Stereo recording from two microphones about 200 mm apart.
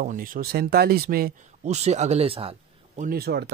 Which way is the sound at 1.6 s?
35° right (ahead or behind).